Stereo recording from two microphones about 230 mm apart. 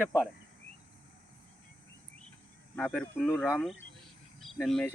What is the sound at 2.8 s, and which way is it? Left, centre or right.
Speech, centre.